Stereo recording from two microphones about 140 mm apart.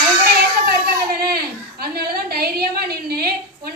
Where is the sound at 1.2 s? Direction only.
90° right.